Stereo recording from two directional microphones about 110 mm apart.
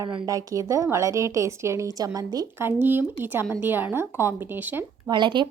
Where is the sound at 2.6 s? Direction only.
20° right (ahead or behind).